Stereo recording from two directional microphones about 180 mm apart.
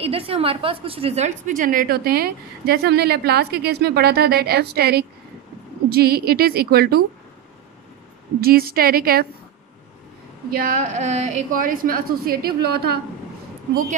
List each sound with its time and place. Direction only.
0.0 s a woman's voice: 30° right (ahead or behind); by 7.0 s 60° right (ahead or behind)
8.4 s a woman's voice: 55° right (ahead or behind)
10.5 s a woman's voice: 50° right (ahead or behind)